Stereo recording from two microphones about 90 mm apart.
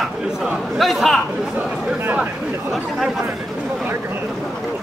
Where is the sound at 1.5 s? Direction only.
10° right (ahead or behind).